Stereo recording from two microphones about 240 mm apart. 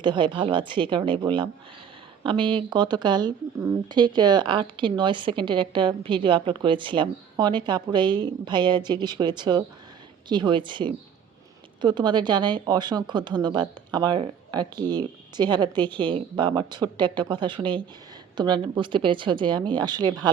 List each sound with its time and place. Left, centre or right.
0.0 s speech: centre